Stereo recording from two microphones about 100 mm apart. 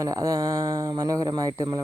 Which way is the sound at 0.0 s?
30° right (ahead or behind).